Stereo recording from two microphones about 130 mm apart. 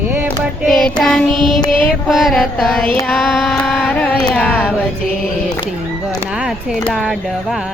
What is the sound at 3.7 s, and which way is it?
Speech, 10° left (ahead or behind).